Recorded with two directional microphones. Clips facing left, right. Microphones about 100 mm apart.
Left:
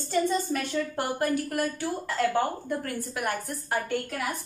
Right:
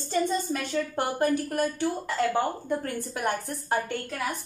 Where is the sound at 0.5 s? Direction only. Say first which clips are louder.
Even; 25° right (ahead or behind).